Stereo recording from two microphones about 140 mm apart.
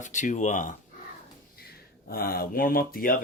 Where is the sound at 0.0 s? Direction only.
60° left (ahead or behind).